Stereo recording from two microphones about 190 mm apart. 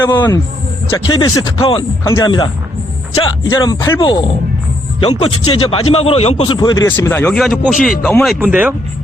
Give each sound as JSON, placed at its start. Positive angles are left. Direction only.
{"t": 0.0, "sound": "a man's voice", "side_deg": 20}
{"t": 7.4, "sound": "speech", "side_deg": 0}